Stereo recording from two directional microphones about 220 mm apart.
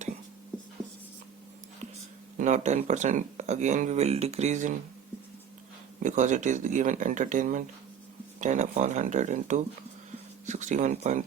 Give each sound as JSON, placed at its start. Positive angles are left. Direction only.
{"t": 2.4, "sound": "speech", "side_deg": -30}
{"t": 6.0, "sound": "speech", "side_deg": -35}